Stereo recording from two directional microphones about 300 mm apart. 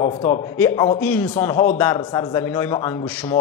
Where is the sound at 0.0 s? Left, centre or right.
Centre.